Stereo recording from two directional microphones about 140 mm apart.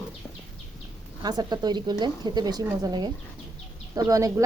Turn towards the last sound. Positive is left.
turn(degrees=-25)  # may be behind; listen again after turning